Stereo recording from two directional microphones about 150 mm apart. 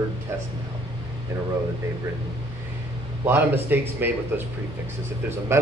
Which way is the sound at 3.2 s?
15° right (ahead or behind).